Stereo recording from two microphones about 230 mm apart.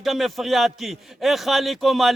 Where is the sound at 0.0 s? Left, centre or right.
Centre.